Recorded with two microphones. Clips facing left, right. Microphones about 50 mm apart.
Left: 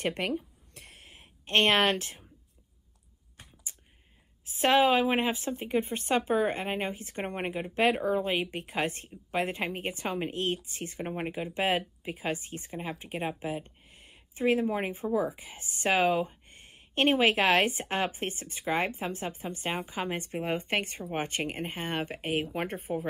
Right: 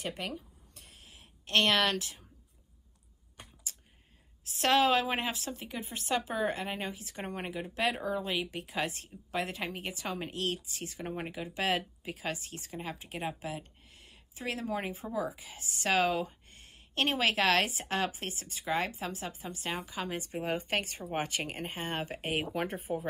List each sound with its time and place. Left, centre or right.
0.0 s speech: left
0.7 s a sound: left
1.0 s a sound: left
3.7 s computer keyboard: centre
4.6 s a woman's voice: left
20.2 s a woman's voice: left
21.2 s speech: left
22.2 s speech: centre
22.9 s speech: left